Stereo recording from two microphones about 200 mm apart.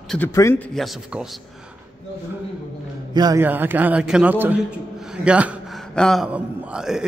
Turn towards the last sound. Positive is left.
turn(degrees=-5)  # may be behind; listen again after turning